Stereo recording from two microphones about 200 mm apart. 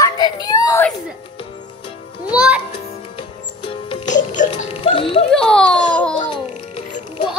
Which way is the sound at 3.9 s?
40° left (ahead or behind).